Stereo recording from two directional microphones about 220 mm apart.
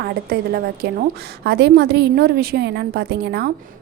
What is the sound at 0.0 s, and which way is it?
A woman's voice, 45° right (ahead or behind).